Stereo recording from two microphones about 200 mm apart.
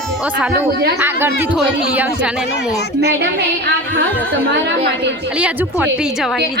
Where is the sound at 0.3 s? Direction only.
5° right (ahead or behind).